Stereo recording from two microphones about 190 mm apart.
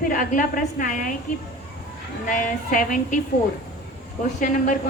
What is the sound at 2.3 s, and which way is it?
Speech, 45° left (ahead or behind).